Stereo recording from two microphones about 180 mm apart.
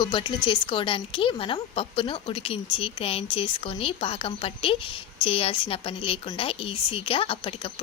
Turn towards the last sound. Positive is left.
turn(degrees=30)  # may be behind; listen again after turning